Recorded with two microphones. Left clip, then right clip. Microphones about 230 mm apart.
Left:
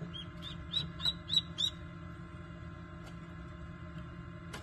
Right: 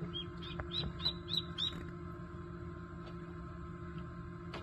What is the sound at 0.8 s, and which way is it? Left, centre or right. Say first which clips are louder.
Bird: left 3 dB; left.